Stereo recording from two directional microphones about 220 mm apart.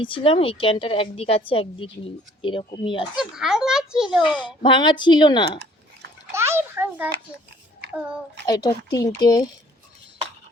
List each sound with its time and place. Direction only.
0.0 s a woman's voice: 25° left (ahead or behind)
3.2 s a child's voice: 5° right (ahead or behind)
4.4 s a woman's voice: 20° left (ahead or behind)
6.3 s a sound: 10° right (ahead or behind)
8.4 s speech: 20° left (ahead or behind)